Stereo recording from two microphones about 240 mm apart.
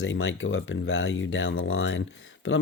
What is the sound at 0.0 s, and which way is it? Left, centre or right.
Speech, left.